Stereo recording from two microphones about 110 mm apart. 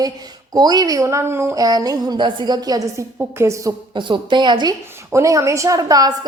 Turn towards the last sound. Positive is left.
turn(degrees=-35)  # may be behind; listen again after turning